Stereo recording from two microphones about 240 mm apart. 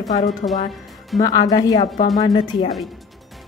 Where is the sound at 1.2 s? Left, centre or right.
Centre.